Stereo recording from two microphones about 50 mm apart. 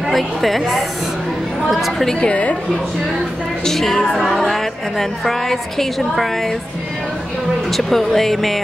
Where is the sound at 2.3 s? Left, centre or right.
Left.